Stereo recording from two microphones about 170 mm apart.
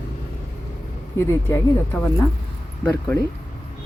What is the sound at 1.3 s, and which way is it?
Speech, 15° left (ahead or behind).